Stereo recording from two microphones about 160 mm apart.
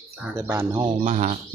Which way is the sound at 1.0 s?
45° right (ahead or behind).